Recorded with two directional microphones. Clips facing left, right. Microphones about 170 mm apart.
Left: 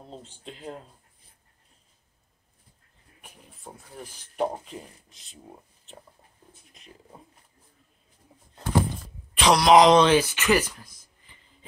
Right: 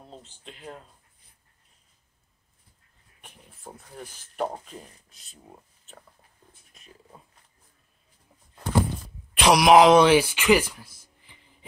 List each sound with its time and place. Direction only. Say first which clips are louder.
0.2 s speech: left 4 dB; 35° left (ahead or behind)
3.2 s speech: left 1 dB; centre (ahead or behind)
4.4 s speech: left 2 dB; 15° left (ahead or behind)
9.4 s speech: right 1 dB; 10° right (ahead or behind)